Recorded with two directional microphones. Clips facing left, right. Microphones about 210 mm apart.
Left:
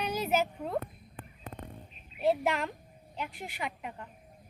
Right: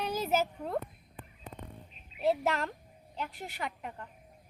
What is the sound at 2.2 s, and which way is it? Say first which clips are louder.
Speech: left 1 dB; centre (ahead or behind).